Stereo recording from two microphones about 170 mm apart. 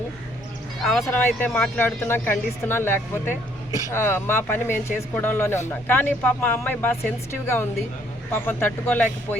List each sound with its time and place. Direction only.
0.8 s speech: centre (ahead or behind)
1.0 s speech: 10° left (ahead or behind)